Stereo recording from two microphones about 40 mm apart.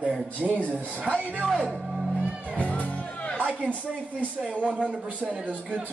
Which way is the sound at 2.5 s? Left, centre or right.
Left.